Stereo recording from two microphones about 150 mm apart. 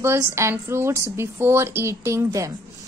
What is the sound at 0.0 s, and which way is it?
A woman's voice, 15° right (ahead or behind).